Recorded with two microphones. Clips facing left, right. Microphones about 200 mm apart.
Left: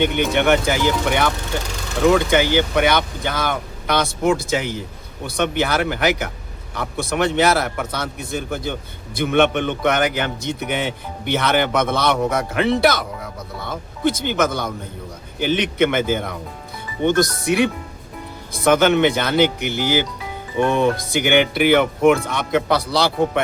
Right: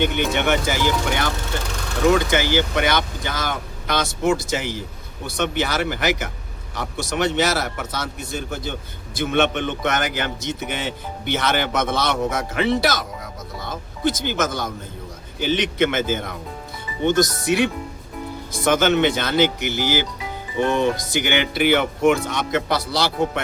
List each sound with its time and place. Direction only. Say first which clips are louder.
0.3 s a man's voice: left 6 dB; 55° left (ahead or behind)
18.5 s a man's voice: left 3 dB; 55° left (ahead or behind)